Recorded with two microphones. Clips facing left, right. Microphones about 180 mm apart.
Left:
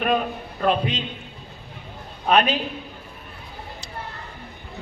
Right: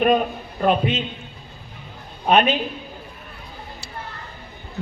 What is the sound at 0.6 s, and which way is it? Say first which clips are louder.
Speech: right 3 dB; 5° right (ahead or behind).